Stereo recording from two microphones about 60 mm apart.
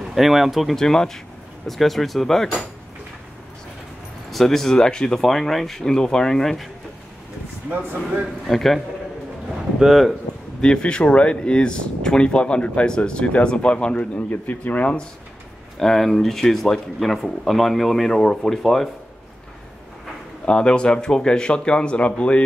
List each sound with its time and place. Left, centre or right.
0.0 s speech: centre
4.3 s speech: centre
8.5 s speech: centre
10.6 s speech: centre
14.3 s speech: left
15.8 s speech: centre
20.4 s speech: centre